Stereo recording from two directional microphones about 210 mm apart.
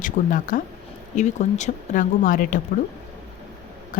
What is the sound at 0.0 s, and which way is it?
Speech, 40° left (ahead or behind).